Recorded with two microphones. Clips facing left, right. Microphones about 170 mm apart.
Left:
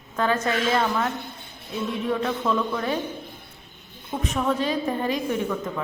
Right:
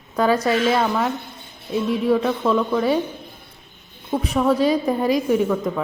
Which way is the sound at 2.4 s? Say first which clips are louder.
Right 5 dB; 30° right (ahead or behind).